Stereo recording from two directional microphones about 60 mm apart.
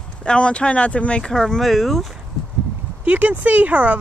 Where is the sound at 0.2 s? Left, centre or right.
Centre.